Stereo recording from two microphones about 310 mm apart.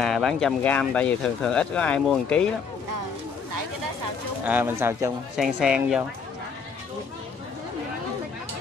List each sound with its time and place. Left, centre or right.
0.0 s speech: centre
4.5 s speech: centre